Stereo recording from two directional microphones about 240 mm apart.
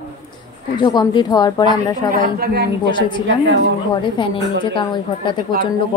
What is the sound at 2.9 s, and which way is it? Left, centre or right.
A woman's voice, centre.